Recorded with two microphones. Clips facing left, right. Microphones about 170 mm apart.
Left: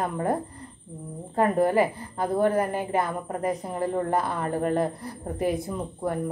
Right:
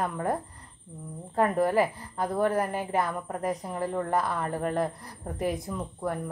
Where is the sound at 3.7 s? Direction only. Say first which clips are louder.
Left 3 dB; 20° left (ahead or behind).